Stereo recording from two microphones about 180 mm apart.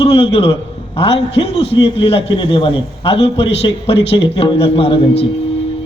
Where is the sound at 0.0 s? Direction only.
30° left (ahead or behind).